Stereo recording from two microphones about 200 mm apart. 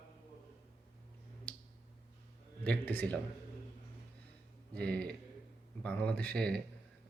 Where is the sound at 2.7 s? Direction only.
10° left (ahead or behind).